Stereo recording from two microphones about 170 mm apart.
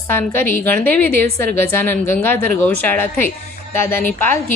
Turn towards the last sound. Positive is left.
turn(degrees=10)  # may be behind; listen again after turning